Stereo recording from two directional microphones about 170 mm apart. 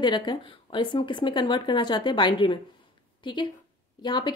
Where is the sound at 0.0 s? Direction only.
25° left (ahead or behind).